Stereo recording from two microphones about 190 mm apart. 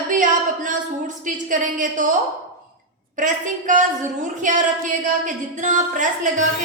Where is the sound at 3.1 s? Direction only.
45° right (ahead or behind).